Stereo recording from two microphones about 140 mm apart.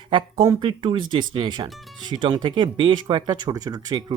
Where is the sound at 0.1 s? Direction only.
35° right (ahead or behind).